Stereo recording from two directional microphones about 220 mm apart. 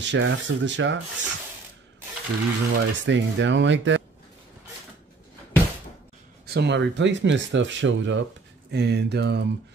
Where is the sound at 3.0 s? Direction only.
55° right (ahead or behind).